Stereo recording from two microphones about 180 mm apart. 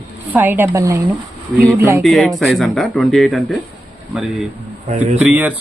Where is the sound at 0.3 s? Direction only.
10° right (ahead or behind).